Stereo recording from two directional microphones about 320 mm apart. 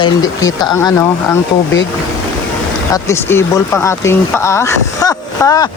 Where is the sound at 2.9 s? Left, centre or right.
Centre.